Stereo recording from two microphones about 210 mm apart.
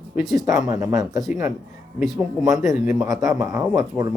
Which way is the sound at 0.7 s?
15° right (ahead or behind).